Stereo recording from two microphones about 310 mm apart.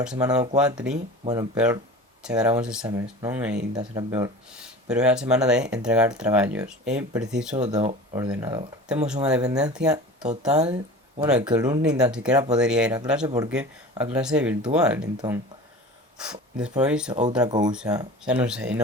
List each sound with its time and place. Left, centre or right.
0.0 s speech: centre
7.5 s speech: centre
11.3 s speech: centre
16.1 s speech: centre
17.1 s speech: right; by 18.8 s centre